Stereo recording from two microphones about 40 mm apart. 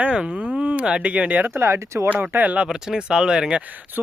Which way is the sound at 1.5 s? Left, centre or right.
Right.